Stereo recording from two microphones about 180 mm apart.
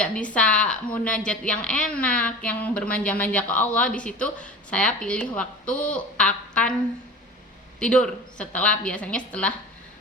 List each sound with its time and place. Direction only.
0.0 s a woman's voice: 5° left (ahead or behind)
7.8 s a woman's voice: 5° left (ahead or behind)